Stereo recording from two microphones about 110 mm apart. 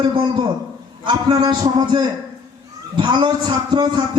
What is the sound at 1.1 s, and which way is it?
A man's voice, 40° right (ahead or behind).